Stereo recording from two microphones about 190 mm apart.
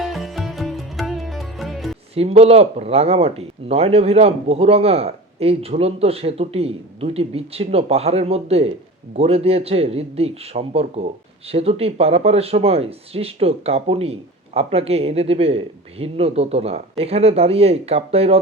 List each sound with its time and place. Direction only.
0.0 s music: centre (ahead or behind)
2.1 s a man's voice: 30° right (ahead or behind)